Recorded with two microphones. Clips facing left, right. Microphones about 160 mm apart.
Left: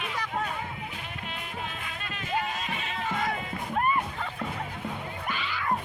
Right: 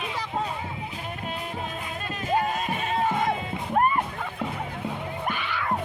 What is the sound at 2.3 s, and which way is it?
Music, 40° right (ahead or behind).